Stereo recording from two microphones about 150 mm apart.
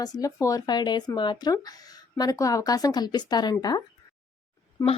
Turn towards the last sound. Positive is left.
turn(degrees=20)  # may be behind; listen again after turning